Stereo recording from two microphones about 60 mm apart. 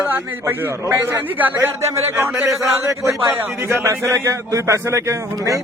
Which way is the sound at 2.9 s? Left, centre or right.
Right.